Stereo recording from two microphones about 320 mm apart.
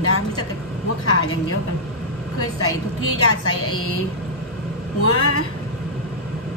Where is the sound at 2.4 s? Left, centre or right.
Left.